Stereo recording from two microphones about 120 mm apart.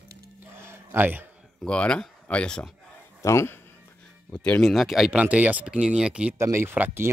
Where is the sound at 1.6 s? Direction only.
10° left (ahead or behind).